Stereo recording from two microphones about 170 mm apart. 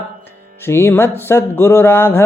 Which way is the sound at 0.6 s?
15° left (ahead or behind).